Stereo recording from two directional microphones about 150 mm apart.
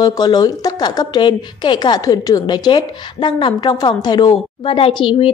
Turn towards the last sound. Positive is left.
turn(degrees=35)  # may be behind; listen again after turning